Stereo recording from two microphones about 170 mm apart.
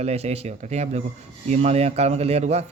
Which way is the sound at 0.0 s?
40° right (ahead or behind).